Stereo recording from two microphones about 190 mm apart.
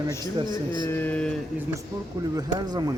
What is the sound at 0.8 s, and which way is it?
Mantra, 10° left (ahead or behind).